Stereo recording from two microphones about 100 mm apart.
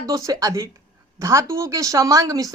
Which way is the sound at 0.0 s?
35° right (ahead or behind).